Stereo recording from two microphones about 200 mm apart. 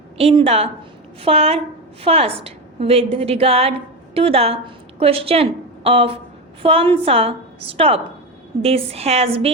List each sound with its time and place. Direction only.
0.2 s a woman's voice: 30° right (ahead or behind)